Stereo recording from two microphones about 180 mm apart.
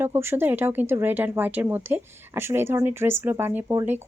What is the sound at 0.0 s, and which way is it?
Speech, 15° right (ahead or behind).